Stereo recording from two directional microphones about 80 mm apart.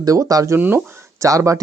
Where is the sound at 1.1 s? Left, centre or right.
Right.